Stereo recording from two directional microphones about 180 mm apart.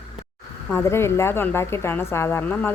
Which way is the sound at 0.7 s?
15° left (ahead or behind).